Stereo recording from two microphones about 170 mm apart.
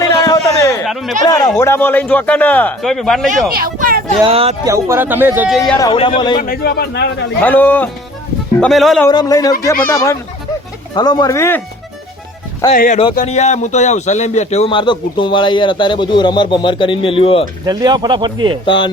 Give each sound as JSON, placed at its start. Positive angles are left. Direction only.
{"t": 0.0, "sound": "a sound", "side_deg": 20}
{"t": 0.9, "sound": "speech", "side_deg": 0}
{"t": 1.2, "sound": "a man's voice", "side_deg": 20}
{"t": 3.5, "sound": "a sound", "side_deg": -55}
{"t": 4.2, "sound": "speech", "side_deg": -35}
{"t": 4.6, "sound": "speech", "side_deg": -15}
{"t": 5.8, "sound": "a man's voice", "side_deg": 30}
{"t": 6.3, "sound": "a man's voice", "side_deg": 55}
{"t": 7.4, "sound": "a man's voice", "side_deg": 10}
{"t": 9.0, "sound": "a man's voice", "side_deg": 20}
{"t": 12.7, "sound": "a man's voice", "side_deg": 55}
{"t": 13.2, "sound": "a man's voice", "side_deg": 40}
{"t": 17.7, "sound": "speech", "side_deg": -25}
{"t": 18.6, "sound": "a man's voice", "side_deg": 30}